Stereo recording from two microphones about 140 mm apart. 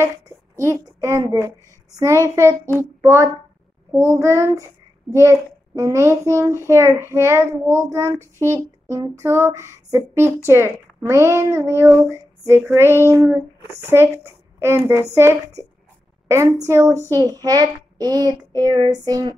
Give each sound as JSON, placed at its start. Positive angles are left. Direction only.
{"t": 0.6, "sound": "a child's voice", "side_deg": -20}